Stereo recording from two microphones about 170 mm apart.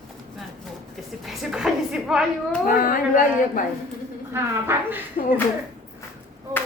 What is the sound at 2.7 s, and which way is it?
Speech, 55° left (ahead or behind).